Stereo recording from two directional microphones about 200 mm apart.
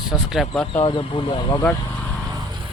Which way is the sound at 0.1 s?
Centre (ahead or behind).